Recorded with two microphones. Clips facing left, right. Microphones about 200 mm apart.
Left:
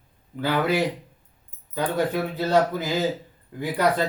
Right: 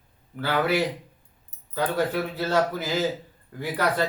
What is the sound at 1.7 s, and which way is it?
A man's voice, 15° left (ahead or behind).